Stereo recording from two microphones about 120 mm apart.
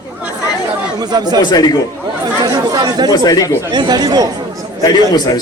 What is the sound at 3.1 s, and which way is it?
Speech, 30° left (ahead or behind).